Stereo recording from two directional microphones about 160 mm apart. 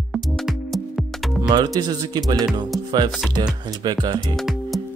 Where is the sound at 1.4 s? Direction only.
25° right (ahead or behind).